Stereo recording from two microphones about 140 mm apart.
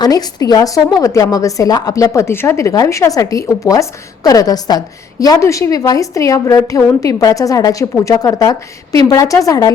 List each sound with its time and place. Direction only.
0.0 s a woman's voice: 25° left (ahead or behind)